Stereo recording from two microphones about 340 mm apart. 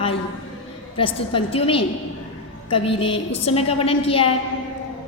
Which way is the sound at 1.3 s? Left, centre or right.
Centre.